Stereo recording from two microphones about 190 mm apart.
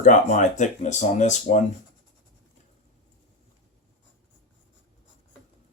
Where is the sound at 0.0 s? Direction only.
40° left (ahead or behind).